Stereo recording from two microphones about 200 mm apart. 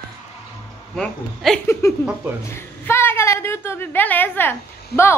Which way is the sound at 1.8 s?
15° left (ahead or behind).